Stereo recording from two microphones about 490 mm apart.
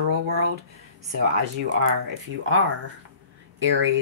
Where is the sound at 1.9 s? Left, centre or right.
Right.